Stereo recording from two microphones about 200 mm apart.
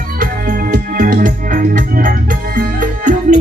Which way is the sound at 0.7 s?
45° right (ahead or behind).